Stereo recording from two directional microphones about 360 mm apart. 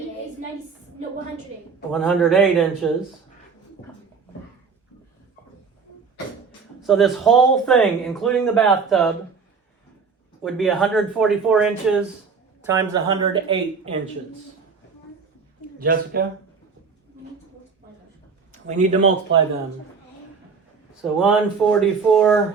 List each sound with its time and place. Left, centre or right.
1.9 s a man's voice: centre
6.8 s a man's voice: centre
10.4 s a man's voice: centre
15.8 s speech: right
18.8 s speech: centre
21.0 s a man's voice: centre